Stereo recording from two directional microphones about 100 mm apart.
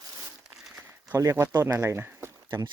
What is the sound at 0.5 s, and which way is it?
Crumpling, 5° right (ahead or behind).